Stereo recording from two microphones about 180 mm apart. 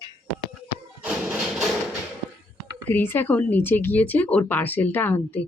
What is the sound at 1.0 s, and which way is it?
Music, centre (ahead or behind).